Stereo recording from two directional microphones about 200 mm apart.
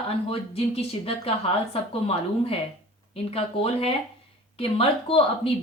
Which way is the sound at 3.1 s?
30° left (ahead or behind).